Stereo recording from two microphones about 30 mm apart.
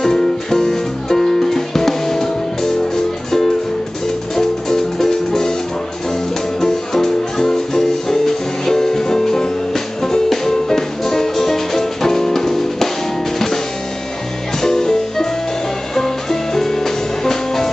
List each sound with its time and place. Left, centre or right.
0.0 s music: centre
4.4 s music: centre
6.6 s music: centre
14.6 s music: centre